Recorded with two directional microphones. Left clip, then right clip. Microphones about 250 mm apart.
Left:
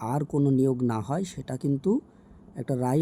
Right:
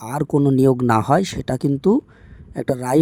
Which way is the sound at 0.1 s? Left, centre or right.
Right.